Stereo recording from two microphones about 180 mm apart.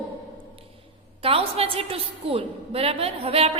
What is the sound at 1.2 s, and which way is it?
A woman's voice, 30° right (ahead or behind).